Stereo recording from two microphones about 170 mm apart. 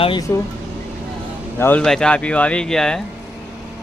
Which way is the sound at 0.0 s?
30° left (ahead or behind).